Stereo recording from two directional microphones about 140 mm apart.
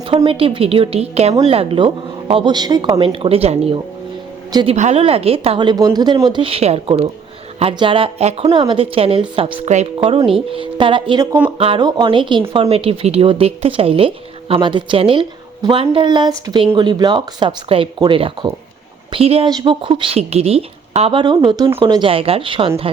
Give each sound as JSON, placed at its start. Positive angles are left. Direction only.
{"t": 0.3, "sound": "a woman's voice", "side_deg": -40}
{"t": 3.0, "sound": "a woman's voice", "side_deg": -40}
{"t": 9.6, "sound": "a woman's voice", "side_deg": -50}
{"t": 11.5, "sound": "a woman's voice", "side_deg": -40}
{"t": 11.8, "sound": "a woman's voice", "side_deg": -30}
{"t": 19.5, "sound": "a woman's voice", "side_deg": -30}